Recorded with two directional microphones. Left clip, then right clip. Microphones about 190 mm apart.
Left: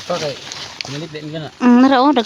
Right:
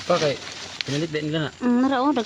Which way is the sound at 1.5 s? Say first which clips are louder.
Left 12 dB; 50° left (ahead or behind).